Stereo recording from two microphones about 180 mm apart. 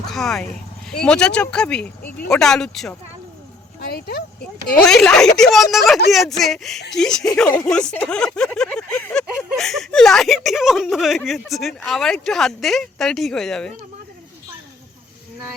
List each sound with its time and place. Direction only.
0.1 s speech: centre (ahead or behind)
3.8 s speech: 60° left (ahead or behind)
4.8 s speech: 5° left (ahead or behind)